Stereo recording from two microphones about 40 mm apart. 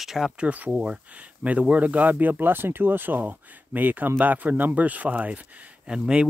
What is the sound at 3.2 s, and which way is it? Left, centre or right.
Speech, right.